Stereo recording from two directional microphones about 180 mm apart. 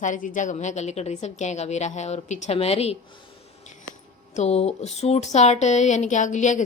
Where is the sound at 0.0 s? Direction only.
45° left (ahead or behind).